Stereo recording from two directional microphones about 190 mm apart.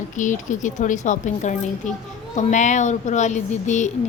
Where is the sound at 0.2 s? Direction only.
40° left (ahead or behind).